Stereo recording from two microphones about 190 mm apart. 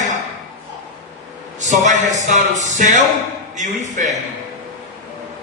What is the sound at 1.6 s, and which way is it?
A man's voice, 40° right (ahead or behind).